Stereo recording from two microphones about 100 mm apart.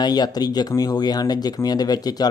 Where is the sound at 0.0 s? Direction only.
45° left (ahead or behind).